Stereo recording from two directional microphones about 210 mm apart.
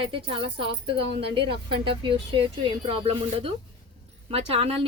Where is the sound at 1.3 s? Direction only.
55° right (ahead or behind).